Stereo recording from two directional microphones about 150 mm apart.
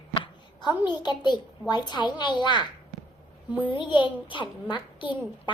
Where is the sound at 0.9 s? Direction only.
30° left (ahead or behind).